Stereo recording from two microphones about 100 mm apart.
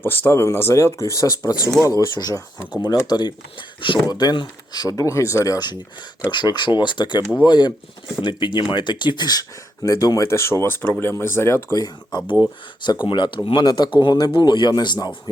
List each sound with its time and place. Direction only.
0.0 s speech: 20° left (ahead or behind); by 5.7 s 40° left (ahead or behind)
6.3 s speech: 50° left (ahead or behind); by 11.8 s 25° left (ahead or behind)
11.8 s speech: 45° left (ahead or behind)